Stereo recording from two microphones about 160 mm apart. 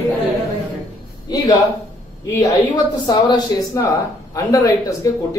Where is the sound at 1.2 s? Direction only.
25° left (ahead or behind).